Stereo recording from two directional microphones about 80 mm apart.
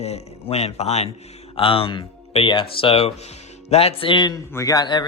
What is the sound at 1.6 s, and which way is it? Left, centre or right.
Speech, left.